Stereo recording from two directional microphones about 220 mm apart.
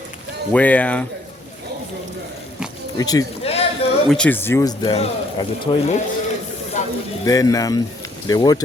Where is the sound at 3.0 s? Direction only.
15° left (ahead or behind).